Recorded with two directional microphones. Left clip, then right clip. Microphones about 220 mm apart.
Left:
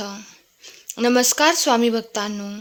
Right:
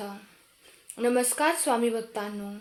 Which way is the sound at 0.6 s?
40° left (ahead or behind).